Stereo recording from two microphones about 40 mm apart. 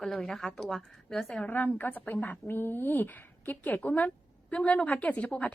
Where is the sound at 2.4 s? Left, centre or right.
Left.